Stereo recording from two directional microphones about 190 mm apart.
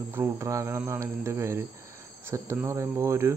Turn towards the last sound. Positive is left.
turn(degrees=-15)  # may be behind; listen again after turning